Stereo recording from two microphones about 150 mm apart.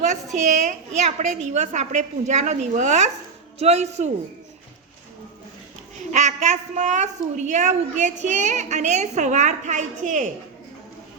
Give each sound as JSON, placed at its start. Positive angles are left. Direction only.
{"t": 0.3, "sound": "a woman's voice", "side_deg": -55}
{"t": 6.1, "sound": "a woman's voice", "side_deg": -55}